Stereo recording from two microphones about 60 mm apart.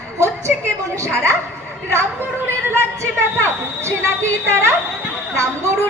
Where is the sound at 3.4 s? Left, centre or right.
Right.